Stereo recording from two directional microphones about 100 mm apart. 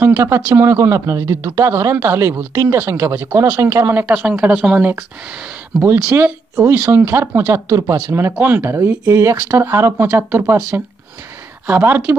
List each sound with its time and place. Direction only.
0.0 s a sound: 25° right (ahead or behind)
0.6 s speech: 25° right (ahead or behind)
11.6 s speech: 15° right (ahead or behind)